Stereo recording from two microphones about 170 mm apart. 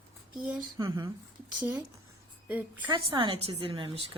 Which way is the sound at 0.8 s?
25° right (ahead or behind).